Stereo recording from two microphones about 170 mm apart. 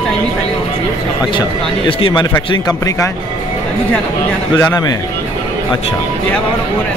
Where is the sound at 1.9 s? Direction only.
30° left (ahead or behind).